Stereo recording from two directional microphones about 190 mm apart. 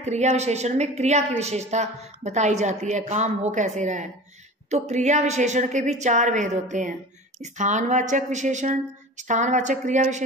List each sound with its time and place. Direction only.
0.0 s a woman's voice: 35° right (ahead or behind)